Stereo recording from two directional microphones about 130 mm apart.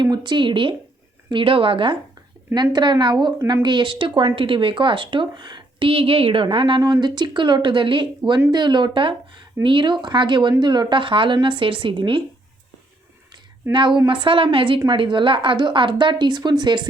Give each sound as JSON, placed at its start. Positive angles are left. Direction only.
{"t": 0.0, "sound": "a woman's voice", "side_deg": -35}
{"t": 13.7, "sound": "a woman's voice", "side_deg": -40}